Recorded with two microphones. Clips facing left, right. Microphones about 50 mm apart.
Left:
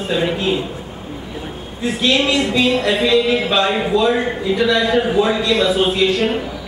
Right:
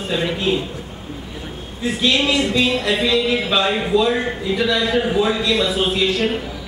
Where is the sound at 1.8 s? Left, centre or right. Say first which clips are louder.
Left 2 dB; centre.